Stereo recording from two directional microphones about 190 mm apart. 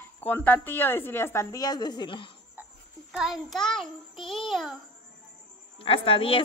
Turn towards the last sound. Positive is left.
turn(degrees=30)  # may be behind; listen again after turning